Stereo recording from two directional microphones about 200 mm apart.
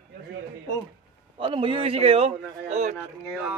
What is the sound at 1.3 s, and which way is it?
A man's voice, 25° right (ahead or behind).